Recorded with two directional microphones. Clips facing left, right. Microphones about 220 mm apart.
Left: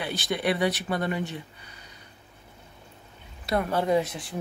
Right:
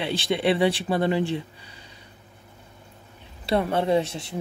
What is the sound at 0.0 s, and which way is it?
Speech, 25° right (ahead or behind).